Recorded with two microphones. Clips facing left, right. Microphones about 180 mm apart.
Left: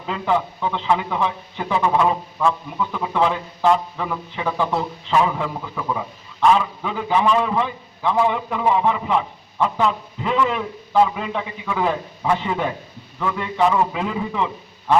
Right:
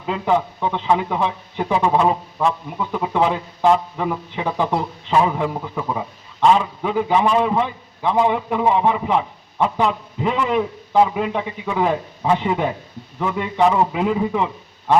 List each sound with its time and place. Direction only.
0.1 s a man's voice: 20° right (ahead or behind)